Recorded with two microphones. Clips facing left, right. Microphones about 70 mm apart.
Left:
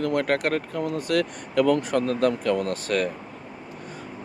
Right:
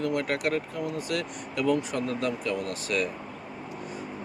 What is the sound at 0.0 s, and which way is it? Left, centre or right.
Speech, left.